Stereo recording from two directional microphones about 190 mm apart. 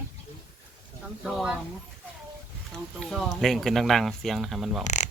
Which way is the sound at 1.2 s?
Centre (ahead or behind).